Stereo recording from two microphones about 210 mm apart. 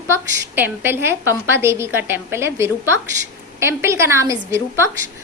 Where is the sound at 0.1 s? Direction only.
10° right (ahead or behind).